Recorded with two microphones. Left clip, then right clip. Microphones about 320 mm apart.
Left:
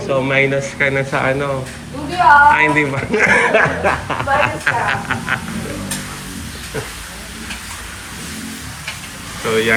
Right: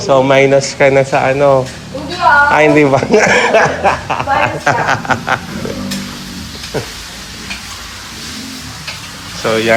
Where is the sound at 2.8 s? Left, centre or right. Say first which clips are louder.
Right 10 dB; right.